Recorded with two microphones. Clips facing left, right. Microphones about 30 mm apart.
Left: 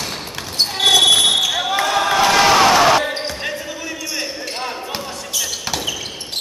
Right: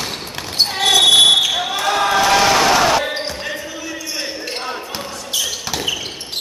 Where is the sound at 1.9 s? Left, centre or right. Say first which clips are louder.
Right 2 dB; centre.